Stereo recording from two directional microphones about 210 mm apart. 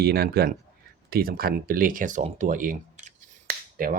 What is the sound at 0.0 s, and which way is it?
Speech, 45° right (ahead or behind).